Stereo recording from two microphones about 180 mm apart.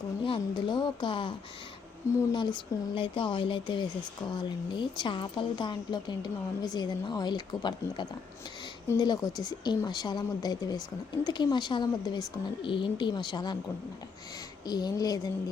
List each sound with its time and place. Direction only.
0.3 s speech: 25° left (ahead or behind)
14.7 s speech: 20° left (ahead or behind)